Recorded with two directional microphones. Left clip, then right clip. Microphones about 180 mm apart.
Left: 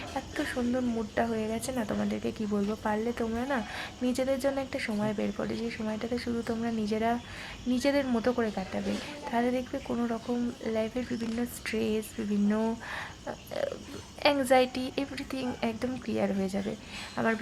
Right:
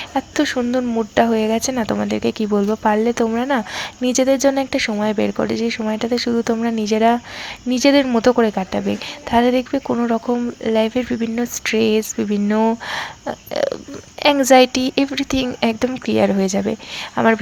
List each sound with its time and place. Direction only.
0.1 s speech: 35° right (ahead or behind)